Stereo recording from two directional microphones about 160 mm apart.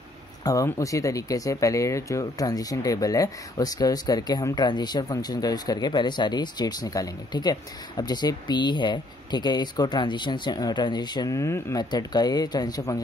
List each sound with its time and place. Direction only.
0.4 s speech: 20° left (ahead or behind)